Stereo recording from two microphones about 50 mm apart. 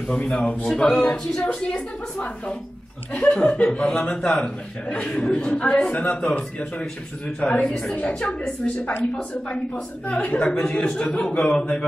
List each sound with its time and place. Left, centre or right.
0.1 s a man's voice: left
10.1 s a man's voice: left